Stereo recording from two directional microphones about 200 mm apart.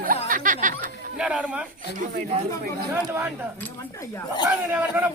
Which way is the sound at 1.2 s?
5° right (ahead or behind).